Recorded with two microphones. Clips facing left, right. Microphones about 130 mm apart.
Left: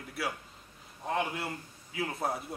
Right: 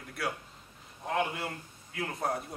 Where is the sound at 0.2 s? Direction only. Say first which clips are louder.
Right 1 dB; centre (ahead or behind).